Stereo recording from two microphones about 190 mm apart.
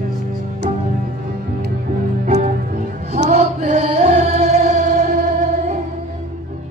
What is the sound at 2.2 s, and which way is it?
Music, 40° right (ahead or behind).